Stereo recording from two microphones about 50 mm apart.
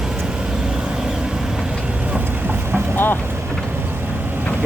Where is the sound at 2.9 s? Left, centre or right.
Left.